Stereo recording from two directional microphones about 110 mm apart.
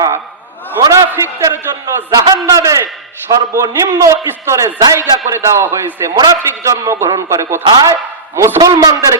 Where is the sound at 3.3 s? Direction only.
40° right (ahead or behind).